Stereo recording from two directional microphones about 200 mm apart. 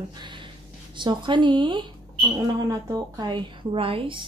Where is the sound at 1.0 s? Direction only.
25° right (ahead or behind).